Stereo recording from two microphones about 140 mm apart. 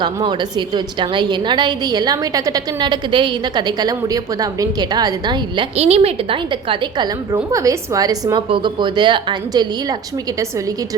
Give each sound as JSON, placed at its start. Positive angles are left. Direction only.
{"t": 0.0, "sound": "a woman's voice", "side_deg": -30}
{"t": 5.7, "sound": "a woman's voice", "side_deg": -45}
{"t": 7.3, "sound": "a woman's voice", "side_deg": -20}